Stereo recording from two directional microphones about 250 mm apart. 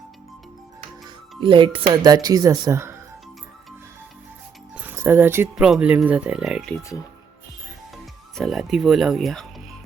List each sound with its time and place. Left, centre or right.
1.4 s speech: centre
4.7 s speech: centre
8.4 s speech: centre